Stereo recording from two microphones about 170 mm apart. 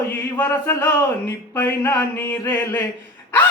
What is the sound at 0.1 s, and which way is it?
Chant, 15° left (ahead or behind).